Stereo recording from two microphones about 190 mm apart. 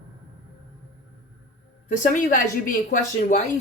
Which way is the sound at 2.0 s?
45° left (ahead or behind).